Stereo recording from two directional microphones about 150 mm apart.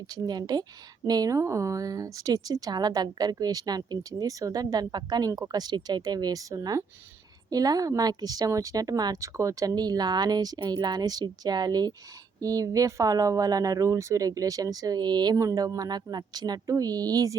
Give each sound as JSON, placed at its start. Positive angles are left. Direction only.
{"t": 0.1, "sound": "a woman's voice", "side_deg": -25}